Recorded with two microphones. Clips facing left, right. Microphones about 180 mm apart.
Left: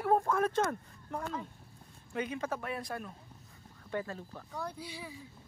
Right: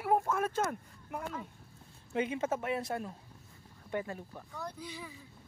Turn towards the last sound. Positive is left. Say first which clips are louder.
# even
turn(degrees=10)  # may be behind; listen again after turning